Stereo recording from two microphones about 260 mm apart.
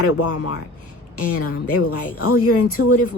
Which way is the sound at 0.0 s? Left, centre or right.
Left.